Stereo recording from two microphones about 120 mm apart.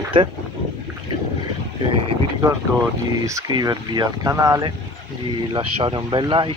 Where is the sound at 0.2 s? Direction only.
45° right (ahead or behind).